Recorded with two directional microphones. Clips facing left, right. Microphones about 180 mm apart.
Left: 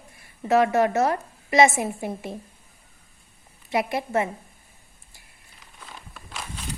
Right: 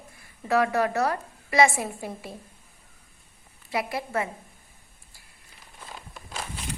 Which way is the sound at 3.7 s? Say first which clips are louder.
Left 4 dB; 25° left (ahead or behind).